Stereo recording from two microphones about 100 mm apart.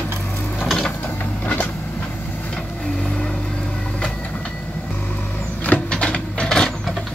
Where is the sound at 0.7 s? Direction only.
Centre (ahead or behind).